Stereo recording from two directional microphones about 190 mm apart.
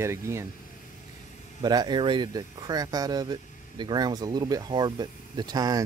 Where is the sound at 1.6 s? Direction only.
20° right (ahead or behind).